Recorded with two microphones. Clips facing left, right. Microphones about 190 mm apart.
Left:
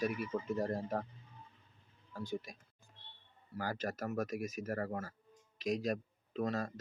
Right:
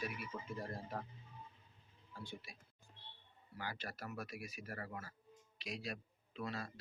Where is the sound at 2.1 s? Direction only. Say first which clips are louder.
Left 10 dB; 40° left (ahead or behind).